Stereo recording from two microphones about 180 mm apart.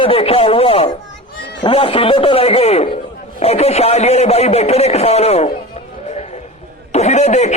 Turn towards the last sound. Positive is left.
turn(degrees=40)  # may be behind; listen again after turning